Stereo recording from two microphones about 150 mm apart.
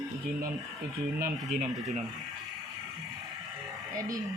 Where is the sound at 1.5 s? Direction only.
50° right (ahead or behind).